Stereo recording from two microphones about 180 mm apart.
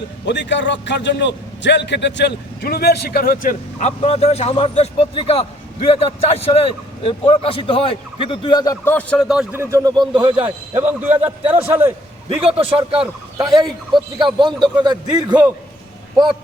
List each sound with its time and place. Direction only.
0.3 s a man's voice: 80° left; by 3.5 s 55° left (ahead or behind)
3.8 s a man's voice: 35° left (ahead or behind); by 9.2 s 10° left (ahead or behind)
9.2 s speech: 5° right (ahead or behind)
9.6 s a man's voice: 15° right (ahead or behind)
10.4 s a man's voice: 10° right (ahead or behind)
12.5 s a man's voice: 30° right (ahead or behind)